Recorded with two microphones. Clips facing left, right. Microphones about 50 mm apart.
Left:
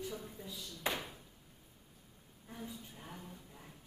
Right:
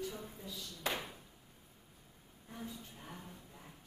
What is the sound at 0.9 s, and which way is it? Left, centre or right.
Ping, centre.